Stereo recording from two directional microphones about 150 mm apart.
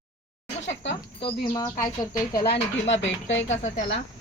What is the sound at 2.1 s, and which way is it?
Speech, 25° left (ahead or behind).